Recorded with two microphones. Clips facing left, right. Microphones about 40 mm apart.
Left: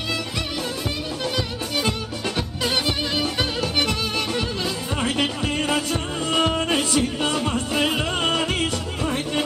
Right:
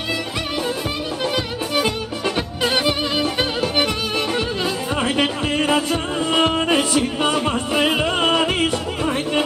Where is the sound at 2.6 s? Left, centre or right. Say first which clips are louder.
Right 4 dB; right.